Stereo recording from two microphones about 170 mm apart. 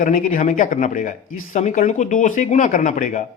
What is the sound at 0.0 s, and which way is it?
Speech, 50° left (ahead or behind).